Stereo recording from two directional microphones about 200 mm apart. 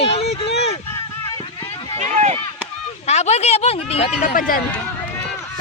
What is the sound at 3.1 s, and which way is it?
Speech, 35° left (ahead or behind).